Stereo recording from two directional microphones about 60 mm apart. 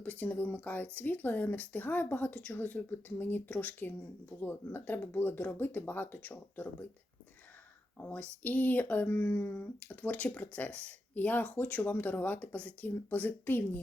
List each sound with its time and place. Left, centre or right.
0.0 s speech: left
7.9 s speech: left
9.1 s speech: left